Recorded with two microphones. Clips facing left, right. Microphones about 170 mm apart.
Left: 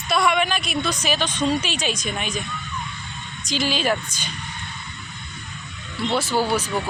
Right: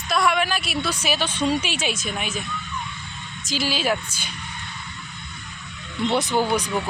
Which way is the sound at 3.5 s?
5° right (ahead or behind).